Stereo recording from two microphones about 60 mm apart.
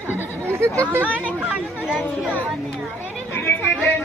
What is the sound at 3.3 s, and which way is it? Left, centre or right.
Chatter, left.